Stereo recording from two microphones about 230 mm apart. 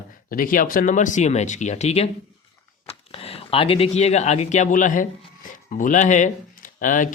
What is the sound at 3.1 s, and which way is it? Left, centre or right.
Speech, left.